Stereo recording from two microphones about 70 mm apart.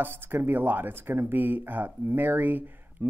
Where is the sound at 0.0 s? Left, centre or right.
Right.